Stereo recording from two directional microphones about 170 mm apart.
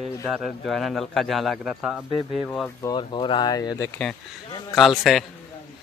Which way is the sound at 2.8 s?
25° left (ahead or behind).